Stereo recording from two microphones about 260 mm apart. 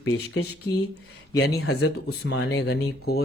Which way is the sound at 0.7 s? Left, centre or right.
Centre.